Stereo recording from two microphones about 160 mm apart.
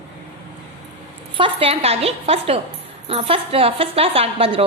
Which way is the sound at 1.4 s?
35° right (ahead or behind).